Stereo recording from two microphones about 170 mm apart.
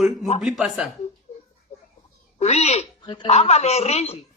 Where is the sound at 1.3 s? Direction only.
40° left (ahead or behind).